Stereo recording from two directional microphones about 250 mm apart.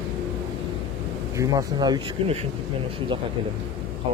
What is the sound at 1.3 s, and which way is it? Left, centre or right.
Speech, centre.